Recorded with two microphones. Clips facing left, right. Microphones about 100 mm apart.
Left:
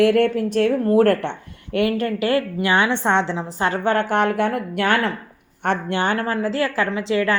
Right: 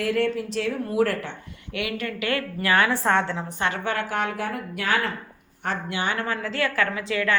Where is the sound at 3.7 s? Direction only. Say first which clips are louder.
Left 8 dB; 50° left (ahead or behind).